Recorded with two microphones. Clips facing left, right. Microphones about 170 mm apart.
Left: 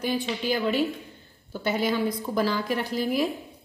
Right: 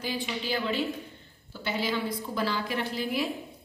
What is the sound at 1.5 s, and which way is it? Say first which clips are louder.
A woman's voice: left 5 dB; 45° left (ahead or behind).